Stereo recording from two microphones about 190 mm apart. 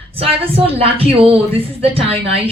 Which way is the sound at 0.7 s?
30° right (ahead or behind).